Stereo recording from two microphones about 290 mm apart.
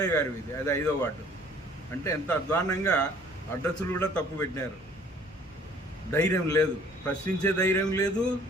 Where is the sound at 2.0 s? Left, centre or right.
Centre.